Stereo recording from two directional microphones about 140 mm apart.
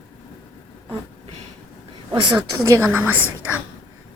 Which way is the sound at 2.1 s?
35° right (ahead or behind).